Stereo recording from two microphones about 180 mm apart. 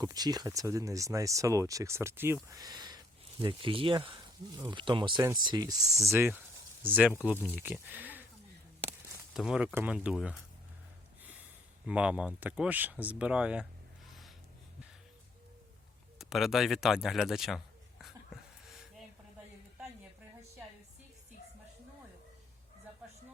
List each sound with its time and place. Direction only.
0.0 s speech: 20° right (ahead or behind)
6.1 s speech: 10° right (ahead or behind)
9.3 s speech: centre (ahead or behind)
11.9 s speech: 5° right (ahead or behind)
16.1 s speech: centre (ahead or behind)
18.0 s a sound: centre (ahead or behind)